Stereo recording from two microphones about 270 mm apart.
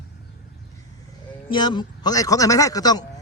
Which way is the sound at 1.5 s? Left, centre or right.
Centre.